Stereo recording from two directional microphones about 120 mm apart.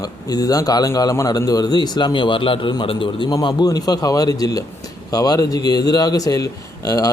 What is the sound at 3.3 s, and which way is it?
A man's voice, 35° left (ahead or behind).